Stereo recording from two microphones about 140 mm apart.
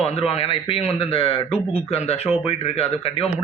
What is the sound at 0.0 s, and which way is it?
A man's voice, 45° left (ahead or behind).